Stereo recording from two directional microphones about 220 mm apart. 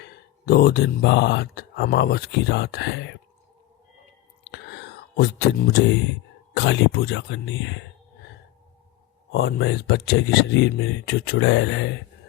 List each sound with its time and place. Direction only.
0.0 s speech: 45° left (ahead or behind)
4.4 s whispering: 50° left (ahead or behind)
6.5 s speech: 55° left (ahead or behind)
9.3 s speech: 45° left (ahead or behind)